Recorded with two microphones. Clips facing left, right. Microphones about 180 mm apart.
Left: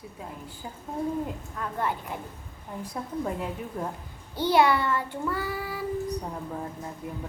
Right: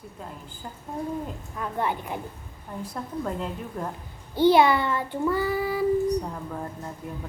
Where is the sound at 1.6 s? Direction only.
15° right (ahead or behind).